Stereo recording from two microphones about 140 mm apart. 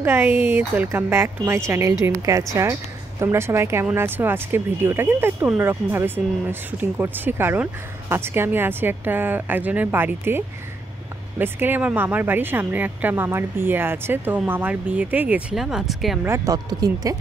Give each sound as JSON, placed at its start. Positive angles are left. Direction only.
{"t": 0.0, "sound": "speech", "side_deg": -15}
{"t": 16.3, "sound": "speech", "side_deg": -25}